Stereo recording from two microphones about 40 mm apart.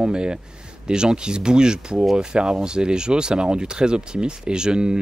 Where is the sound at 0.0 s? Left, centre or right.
Right.